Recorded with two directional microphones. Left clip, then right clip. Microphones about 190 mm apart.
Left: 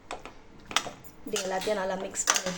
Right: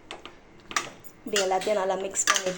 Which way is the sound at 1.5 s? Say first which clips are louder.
Right 2 dB; 20° right (ahead or behind).